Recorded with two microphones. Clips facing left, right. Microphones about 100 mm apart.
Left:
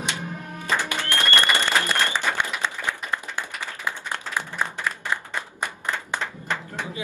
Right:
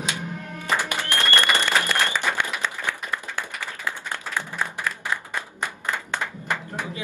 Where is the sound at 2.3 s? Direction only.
20° left (ahead or behind).